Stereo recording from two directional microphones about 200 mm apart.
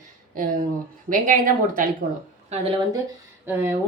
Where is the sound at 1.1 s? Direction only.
45° right (ahead or behind).